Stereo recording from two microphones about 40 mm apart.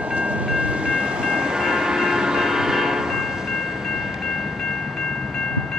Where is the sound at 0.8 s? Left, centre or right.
Right.